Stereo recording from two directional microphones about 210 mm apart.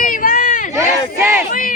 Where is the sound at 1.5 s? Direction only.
40° left (ahead or behind).